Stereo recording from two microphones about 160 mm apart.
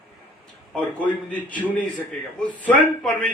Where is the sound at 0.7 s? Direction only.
Centre (ahead or behind).